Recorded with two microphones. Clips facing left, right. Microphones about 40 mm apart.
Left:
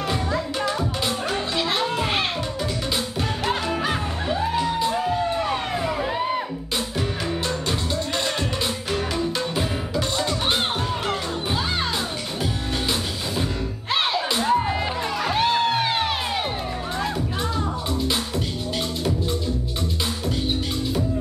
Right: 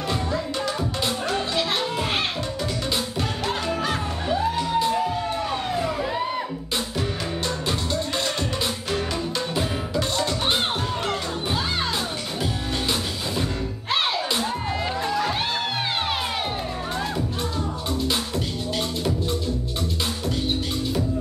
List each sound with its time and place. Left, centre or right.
0.6 s music: centre
3.6 s music: centre
4.9 s music: left
5.8 s music: centre
7.4 s music: centre
13.4 s music: centre
14.4 s music: centre